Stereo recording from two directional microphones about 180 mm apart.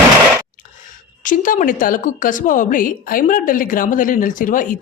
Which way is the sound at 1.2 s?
50° left (ahead or behind).